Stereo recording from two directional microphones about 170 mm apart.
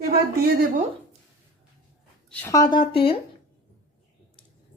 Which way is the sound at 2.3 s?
15° left (ahead or behind).